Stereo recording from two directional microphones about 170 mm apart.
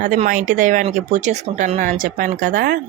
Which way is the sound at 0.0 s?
50° right (ahead or behind).